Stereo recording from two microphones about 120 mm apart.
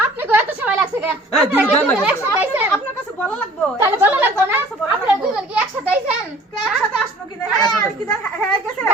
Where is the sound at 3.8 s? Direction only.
20° right (ahead or behind).